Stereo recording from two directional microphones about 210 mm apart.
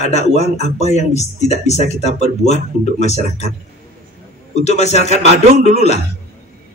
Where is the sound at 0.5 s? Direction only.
30° right (ahead or behind).